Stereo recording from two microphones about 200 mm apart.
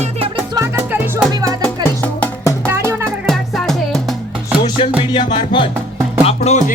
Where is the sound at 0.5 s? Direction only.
15° right (ahead or behind).